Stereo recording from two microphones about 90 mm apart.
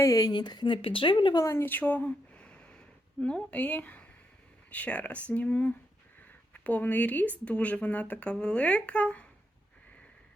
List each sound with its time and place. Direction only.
0.0 s speech: 40° left (ahead or behind)
0.8 s speech: 80° left
1.4 s speech: 30° left (ahead or behind); by 9.2 s 15° left (ahead or behind)